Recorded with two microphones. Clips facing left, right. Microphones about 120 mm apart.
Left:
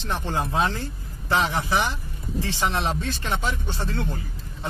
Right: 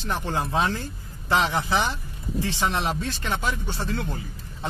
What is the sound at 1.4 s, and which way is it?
Speech, 20° right (ahead or behind).